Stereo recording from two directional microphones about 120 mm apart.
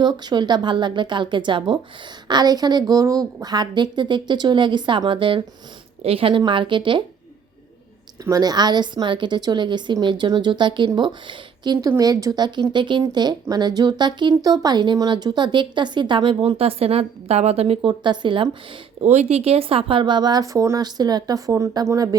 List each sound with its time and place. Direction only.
0.0 s a woman's voice: 40° right (ahead or behind)
8.2 s speech: 30° right (ahead or behind); by 17.7 s 60° right (ahead or behind)
17.8 s speech: 40° right (ahead or behind)
19.0 s speech: 70° right (ahead or behind); by 22.2 s 30° right (ahead or behind)